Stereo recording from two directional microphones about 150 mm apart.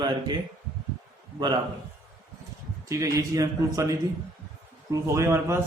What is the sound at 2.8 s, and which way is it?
Speech, 20° right (ahead or behind).